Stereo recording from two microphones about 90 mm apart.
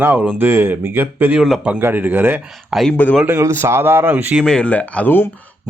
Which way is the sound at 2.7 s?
5° right (ahead or behind).